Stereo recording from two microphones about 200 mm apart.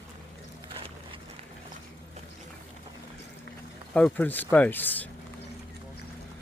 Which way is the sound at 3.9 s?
5° left (ahead or behind).